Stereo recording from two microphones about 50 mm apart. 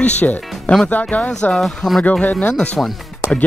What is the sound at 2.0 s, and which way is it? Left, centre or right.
Speech, left.